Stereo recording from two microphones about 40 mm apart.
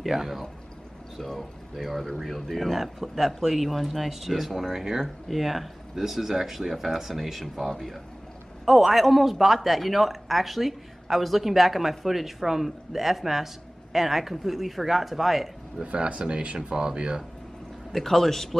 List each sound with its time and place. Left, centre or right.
0.0 s a man's voice: centre
8.6 s a man's voice: centre
15.8 s speech: right
17.9 s a man's voice: centre